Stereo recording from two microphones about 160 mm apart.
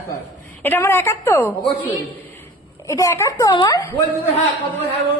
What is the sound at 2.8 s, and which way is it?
A woman's voice, 20° left (ahead or behind).